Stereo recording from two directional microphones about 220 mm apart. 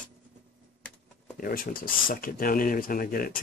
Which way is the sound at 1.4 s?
40° left (ahead or behind).